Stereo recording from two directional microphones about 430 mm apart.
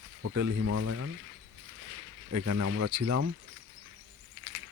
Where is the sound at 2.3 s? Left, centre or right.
Right.